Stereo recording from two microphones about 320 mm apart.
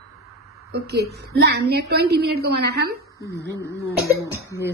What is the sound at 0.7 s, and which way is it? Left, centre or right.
A woman's voice, right.